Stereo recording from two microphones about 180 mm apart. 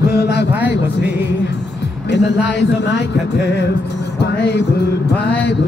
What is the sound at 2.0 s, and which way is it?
A man's voice, 75° left (ahead or behind).